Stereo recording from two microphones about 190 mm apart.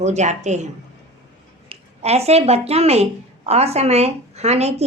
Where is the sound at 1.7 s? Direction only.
35° right (ahead or behind).